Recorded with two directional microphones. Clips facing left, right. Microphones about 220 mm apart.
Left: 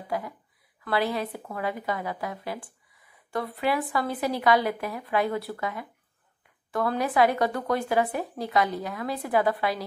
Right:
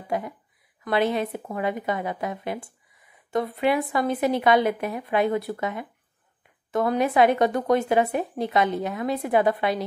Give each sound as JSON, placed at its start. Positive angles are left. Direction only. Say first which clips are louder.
{"t": 0.1, "sound": "speech", "louder": "right 3 dB", "side_deg": -20}